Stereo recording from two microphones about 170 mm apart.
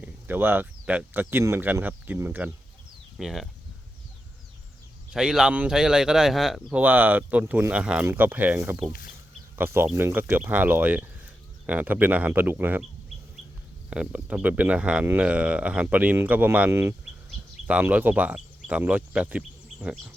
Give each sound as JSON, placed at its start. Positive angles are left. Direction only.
{"t": 0.0, "sound": "speech", "side_deg": -10}
{"t": 5.1, "sound": "speech", "side_deg": -5}
{"t": 8.9, "sound": "speech", "side_deg": 60}
{"t": 9.6, "sound": "speech", "side_deg": -15}
{"t": 13.9, "sound": "speech", "side_deg": -5}